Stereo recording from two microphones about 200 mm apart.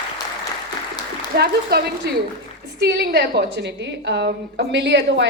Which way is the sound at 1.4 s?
50° right (ahead or behind).